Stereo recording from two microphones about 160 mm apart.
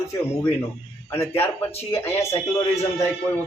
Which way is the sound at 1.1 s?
15° left (ahead or behind).